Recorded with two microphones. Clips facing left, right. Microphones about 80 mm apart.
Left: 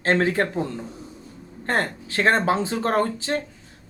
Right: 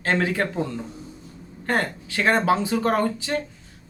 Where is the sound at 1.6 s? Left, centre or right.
Left.